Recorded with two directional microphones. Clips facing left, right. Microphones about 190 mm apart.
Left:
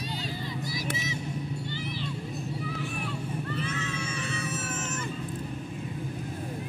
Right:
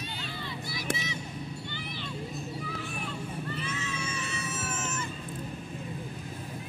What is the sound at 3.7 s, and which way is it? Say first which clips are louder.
Music: left 2 dB; 55° left (ahead or behind).